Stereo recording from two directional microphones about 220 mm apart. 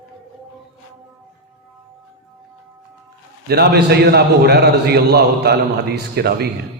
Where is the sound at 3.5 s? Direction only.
45° right (ahead or behind).